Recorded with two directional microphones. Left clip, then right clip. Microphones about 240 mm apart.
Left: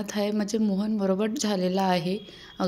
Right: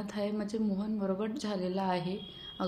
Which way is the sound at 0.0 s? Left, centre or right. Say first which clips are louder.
Left 7 dB; left.